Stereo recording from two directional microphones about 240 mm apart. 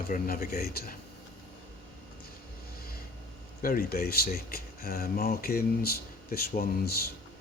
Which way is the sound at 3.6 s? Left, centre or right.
Left.